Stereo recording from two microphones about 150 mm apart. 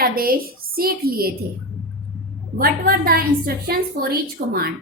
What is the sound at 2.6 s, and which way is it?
A woman's voice, 75° right (ahead or behind).